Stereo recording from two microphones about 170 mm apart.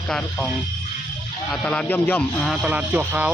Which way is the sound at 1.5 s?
5° left (ahead or behind).